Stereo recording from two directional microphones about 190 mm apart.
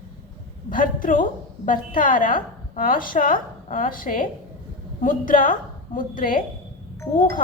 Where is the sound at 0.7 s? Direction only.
45° left (ahead or behind).